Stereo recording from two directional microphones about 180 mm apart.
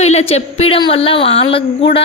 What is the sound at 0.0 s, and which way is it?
A woman's voice, 35° left (ahead or behind).